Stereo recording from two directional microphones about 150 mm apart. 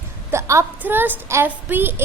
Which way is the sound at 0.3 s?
20° right (ahead or behind).